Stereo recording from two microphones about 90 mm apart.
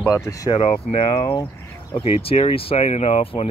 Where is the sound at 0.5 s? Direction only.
85° left; by 1.3 s 70° left (ahead or behind).